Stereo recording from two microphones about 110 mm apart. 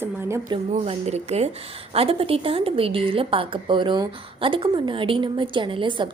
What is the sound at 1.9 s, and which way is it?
A woman's voice, 60° right (ahead or behind).